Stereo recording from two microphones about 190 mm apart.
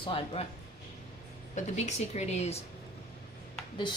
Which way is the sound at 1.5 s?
35° left (ahead or behind).